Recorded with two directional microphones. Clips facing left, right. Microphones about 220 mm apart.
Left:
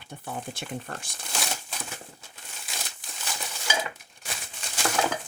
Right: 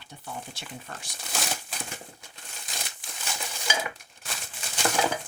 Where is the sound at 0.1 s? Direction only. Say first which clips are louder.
Left 4 dB; 55° left (ahead or behind).